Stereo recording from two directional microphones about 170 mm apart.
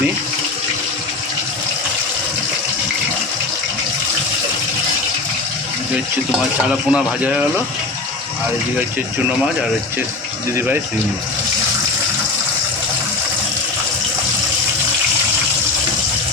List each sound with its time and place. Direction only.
6.7 s speech: 5° right (ahead or behind)